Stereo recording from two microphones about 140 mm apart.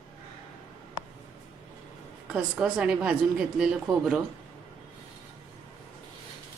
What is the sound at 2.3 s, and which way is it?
Speech, 5° right (ahead or behind).